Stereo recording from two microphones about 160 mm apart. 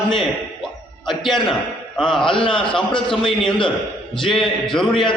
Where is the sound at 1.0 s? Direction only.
Centre (ahead or behind).